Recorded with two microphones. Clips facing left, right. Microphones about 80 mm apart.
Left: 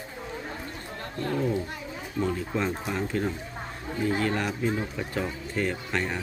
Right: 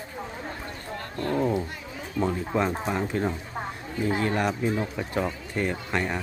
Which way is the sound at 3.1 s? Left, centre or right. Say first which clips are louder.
Right 2 dB; right.